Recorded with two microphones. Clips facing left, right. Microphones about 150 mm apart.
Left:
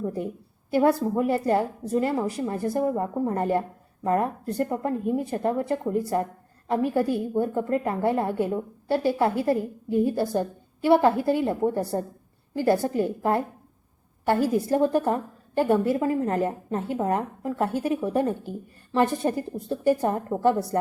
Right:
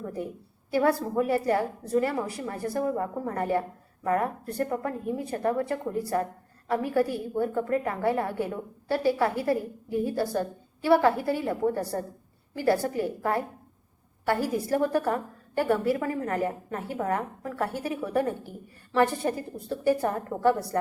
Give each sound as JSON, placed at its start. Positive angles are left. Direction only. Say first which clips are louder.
{"t": 0.0, "sound": "a woman's voice", "louder": "left 4 dB", "side_deg": 20}